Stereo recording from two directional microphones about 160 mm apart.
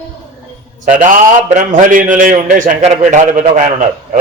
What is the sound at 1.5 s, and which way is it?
A man's voice, 55° right (ahead or behind).